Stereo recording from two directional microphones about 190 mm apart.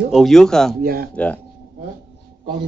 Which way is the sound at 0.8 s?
50° right (ahead or behind).